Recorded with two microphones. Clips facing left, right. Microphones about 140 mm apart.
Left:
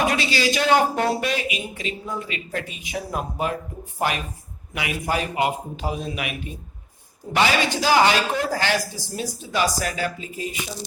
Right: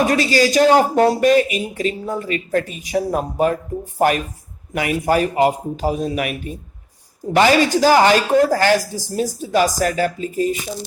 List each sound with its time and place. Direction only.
0.0 s speech: 40° right (ahead or behind)